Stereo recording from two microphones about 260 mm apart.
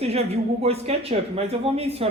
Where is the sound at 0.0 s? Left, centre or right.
Right.